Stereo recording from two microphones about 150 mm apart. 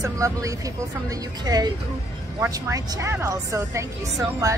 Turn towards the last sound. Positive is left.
turn(degrees=-20)  # may be behind; listen again after turning